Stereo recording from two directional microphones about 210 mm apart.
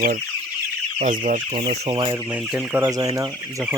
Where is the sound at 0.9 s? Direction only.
35° right (ahead or behind).